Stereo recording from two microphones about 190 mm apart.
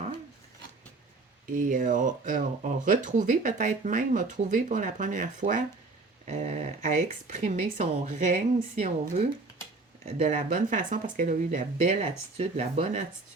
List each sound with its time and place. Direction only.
1.5 s speech: 45° right (ahead or behind)